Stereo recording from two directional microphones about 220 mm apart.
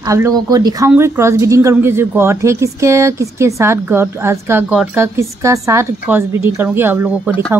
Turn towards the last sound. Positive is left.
turn(degrees=-10)  # may be behind; listen again after turning